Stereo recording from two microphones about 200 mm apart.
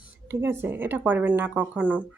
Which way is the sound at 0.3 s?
10° right (ahead or behind).